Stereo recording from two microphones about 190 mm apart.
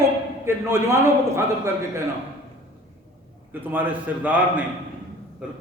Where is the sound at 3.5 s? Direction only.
10° right (ahead or behind).